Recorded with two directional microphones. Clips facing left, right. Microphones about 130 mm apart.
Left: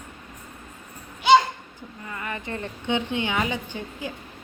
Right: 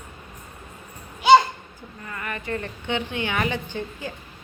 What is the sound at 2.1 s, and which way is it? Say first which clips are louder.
A woman's voice: right 2 dB; 20° left (ahead or behind).